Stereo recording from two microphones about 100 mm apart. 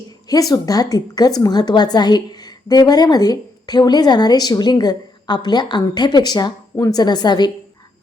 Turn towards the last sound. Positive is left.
turn(degrees=45)  # may be behind; listen again after turning